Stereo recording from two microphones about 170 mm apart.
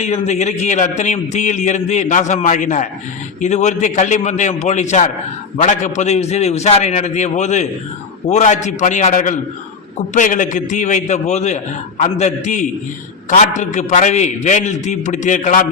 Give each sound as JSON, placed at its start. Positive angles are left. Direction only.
{"t": 0.0, "sound": "a man's voice", "side_deg": 40}